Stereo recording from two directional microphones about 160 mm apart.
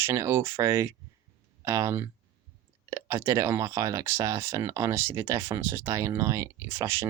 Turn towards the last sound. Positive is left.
turn(degrees=-15)  # may be behind; listen again after turning